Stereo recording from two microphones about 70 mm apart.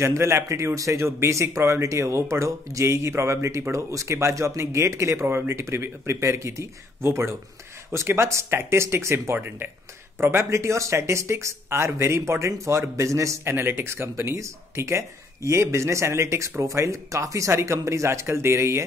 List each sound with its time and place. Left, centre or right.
0.0 s speech: right